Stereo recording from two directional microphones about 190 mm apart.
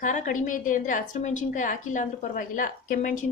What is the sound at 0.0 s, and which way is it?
A woman's voice, 40° left (ahead or behind).